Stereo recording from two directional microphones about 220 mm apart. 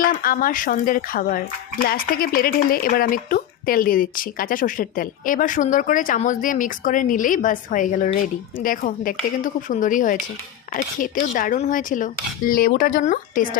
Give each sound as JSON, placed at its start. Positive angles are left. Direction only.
{"t": 0.0, "sound": "speech", "side_deg": 40}